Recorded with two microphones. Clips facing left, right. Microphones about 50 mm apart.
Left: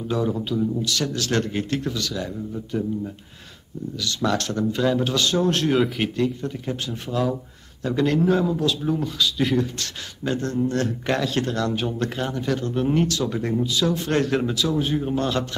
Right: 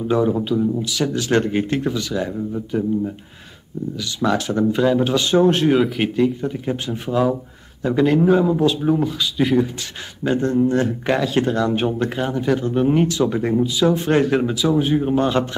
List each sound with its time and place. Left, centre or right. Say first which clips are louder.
0.0 s speech: right 6 dB; right
4.0 s a man's voice: right 3 dB; centre
11.7 s speech: right 6 dB; right
12.0 s a man's voice: right 4 dB; centre